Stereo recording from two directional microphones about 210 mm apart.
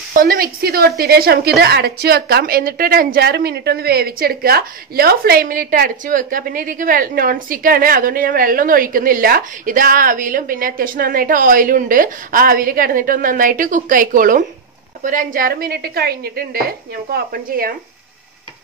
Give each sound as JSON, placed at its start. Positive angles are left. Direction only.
{"t": 0.1, "sound": "a woman's voice", "side_deg": -45}